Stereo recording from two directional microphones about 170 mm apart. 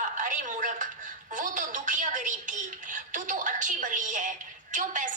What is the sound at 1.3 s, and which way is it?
Music, 50° right (ahead or behind).